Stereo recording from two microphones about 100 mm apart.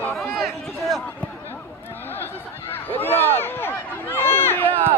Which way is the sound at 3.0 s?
20° left (ahead or behind).